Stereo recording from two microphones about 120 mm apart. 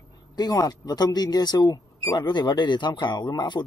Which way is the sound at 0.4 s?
30° left (ahead or behind).